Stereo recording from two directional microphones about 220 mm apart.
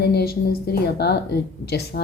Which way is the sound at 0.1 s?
45° left (ahead or behind).